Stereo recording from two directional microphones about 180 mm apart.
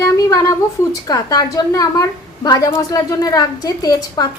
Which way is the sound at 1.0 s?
20° left (ahead or behind).